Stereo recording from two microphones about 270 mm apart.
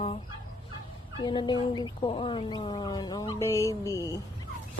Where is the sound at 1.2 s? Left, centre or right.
Centre.